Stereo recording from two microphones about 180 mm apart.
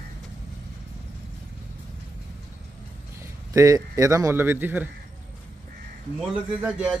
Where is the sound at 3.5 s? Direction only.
20° right (ahead or behind).